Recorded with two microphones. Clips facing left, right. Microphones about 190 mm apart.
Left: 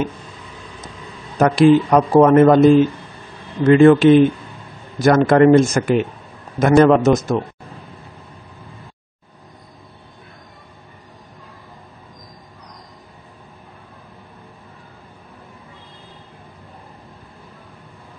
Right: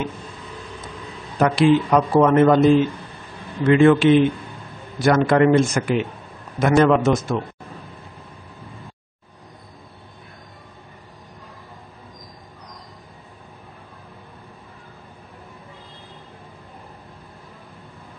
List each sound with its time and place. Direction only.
1.4 s speech: 45° left (ahead or behind)
3.6 s a man's voice: 40° left (ahead or behind)